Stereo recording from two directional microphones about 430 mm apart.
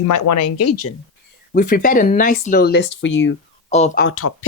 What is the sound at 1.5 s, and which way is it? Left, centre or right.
Speech, centre.